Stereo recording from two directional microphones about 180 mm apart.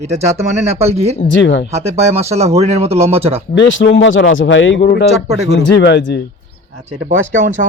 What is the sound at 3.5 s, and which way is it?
Speech, 85° left.